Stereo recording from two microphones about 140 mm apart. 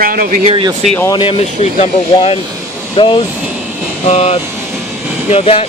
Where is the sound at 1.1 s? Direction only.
40° left (ahead or behind).